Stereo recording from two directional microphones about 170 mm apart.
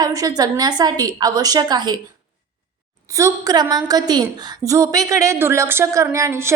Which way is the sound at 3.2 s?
20° right (ahead or behind).